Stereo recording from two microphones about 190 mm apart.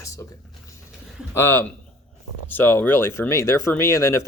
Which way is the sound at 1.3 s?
10° left (ahead or behind).